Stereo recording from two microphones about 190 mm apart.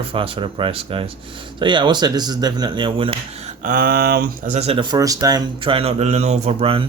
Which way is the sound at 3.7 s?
50° right (ahead or behind).